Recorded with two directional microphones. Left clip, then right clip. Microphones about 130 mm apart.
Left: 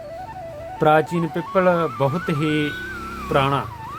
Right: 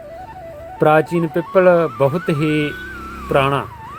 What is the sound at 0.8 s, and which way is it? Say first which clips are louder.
Speech: right 3 dB; 20° right (ahead or behind).